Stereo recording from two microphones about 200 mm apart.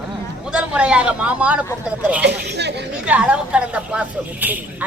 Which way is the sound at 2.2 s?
55° right (ahead or behind).